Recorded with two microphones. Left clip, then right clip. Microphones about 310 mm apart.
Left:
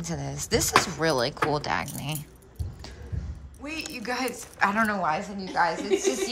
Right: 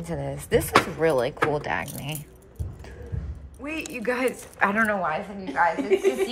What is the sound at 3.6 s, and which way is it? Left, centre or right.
A woman's voice, centre.